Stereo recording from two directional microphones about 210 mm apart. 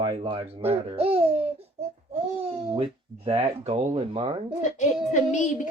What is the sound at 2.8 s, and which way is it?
Speech, 25° right (ahead or behind).